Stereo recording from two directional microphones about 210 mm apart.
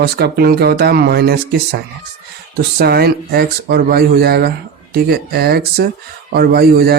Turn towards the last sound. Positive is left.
turn(degrees=-50)  # may be behind; listen again after turning